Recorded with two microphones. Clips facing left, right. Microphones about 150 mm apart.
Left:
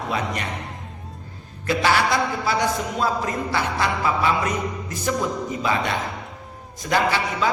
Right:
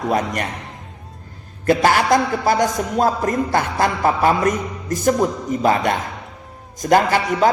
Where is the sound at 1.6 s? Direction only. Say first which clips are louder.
Right 5 dB; 50° right (ahead or behind).